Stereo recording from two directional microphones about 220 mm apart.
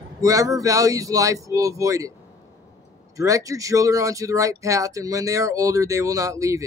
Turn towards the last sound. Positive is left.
turn(degrees=-15)  # may be behind; listen again after turning